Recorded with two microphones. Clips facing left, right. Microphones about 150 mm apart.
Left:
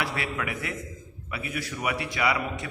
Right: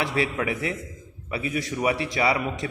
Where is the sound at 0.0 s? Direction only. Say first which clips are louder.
Right 5 dB; 25° right (ahead or behind).